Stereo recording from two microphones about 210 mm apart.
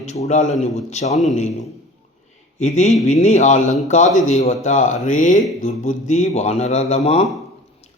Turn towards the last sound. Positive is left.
turn(degrees=30)  # may be behind; listen again after turning